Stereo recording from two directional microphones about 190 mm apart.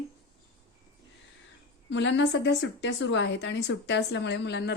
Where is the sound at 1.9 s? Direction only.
70° left (ahead or behind).